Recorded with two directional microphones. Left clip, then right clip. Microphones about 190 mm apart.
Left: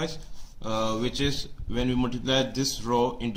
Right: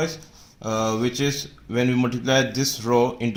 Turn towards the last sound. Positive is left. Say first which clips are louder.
# right 5 dB
turn(degrees=-35)  # may be behind; listen again after turning